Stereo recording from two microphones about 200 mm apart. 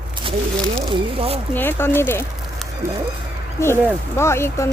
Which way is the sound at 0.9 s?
30° right (ahead or behind).